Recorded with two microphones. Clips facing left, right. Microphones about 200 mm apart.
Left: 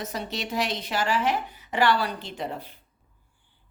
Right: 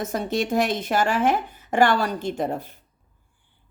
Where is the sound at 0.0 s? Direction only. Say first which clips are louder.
Right 8 dB; 50° right (ahead or behind).